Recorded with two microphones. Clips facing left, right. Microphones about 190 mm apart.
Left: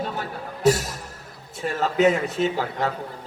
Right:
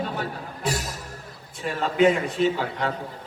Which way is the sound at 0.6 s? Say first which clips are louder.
Left 9 dB; 40° left (ahead or behind).